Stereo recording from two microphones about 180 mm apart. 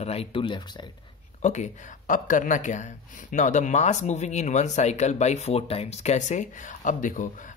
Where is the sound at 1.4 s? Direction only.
40° left (ahead or behind).